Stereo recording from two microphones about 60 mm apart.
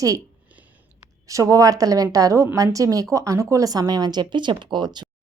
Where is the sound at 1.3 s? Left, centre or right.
Right.